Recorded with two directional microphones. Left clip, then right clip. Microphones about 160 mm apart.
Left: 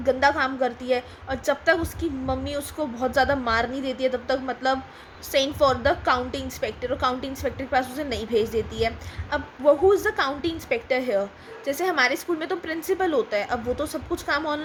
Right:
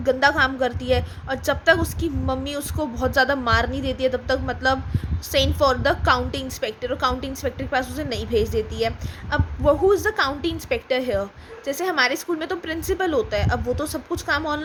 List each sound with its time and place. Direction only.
0.0 s a woman's voice: 20° right (ahead or behind)